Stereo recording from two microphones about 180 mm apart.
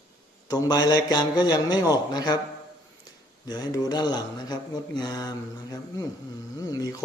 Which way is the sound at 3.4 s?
25° left (ahead or behind).